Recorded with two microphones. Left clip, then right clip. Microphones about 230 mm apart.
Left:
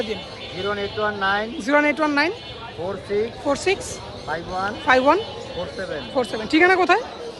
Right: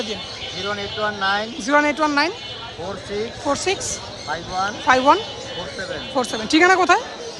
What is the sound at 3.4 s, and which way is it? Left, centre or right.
Speech, centre.